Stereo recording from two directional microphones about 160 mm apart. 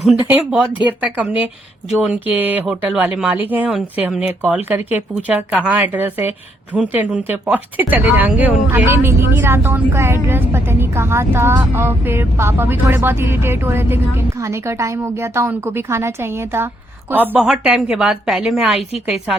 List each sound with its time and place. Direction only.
0.1 s a woman's voice: 5° right (ahead or behind)